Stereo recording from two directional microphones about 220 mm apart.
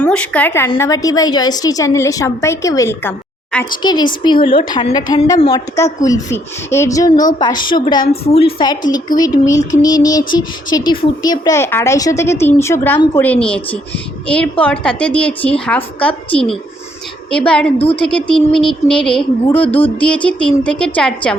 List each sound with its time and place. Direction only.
0.0 s a woman's voice: 5° left (ahead or behind)